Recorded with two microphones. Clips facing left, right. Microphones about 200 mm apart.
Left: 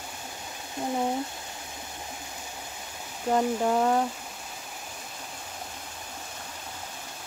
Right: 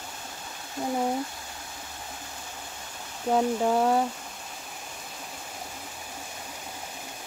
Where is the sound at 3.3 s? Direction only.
5° right (ahead or behind).